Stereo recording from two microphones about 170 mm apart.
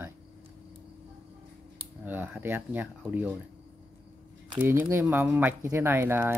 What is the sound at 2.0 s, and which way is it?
Speech, 10° right (ahead or behind).